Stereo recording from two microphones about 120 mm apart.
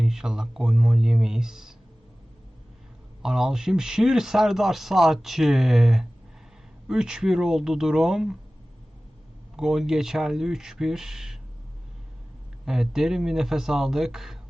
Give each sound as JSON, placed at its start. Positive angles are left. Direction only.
{"t": 0.0, "sound": "speech", "side_deg": -5}
{"t": 3.2, "sound": "speech", "side_deg": -5}
{"t": 9.6, "sound": "speech", "side_deg": -5}
{"t": 12.6, "sound": "speech", "side_deg": -5}